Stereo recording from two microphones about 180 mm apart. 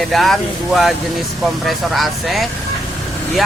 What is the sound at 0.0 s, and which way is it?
Speech, centre (ahead or behind).